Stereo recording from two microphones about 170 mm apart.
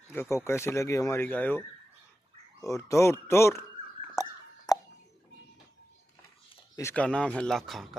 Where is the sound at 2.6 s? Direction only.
20° left (ahead or behind).